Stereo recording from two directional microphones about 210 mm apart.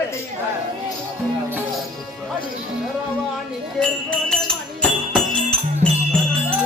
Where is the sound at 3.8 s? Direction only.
5° left (ahead or behind).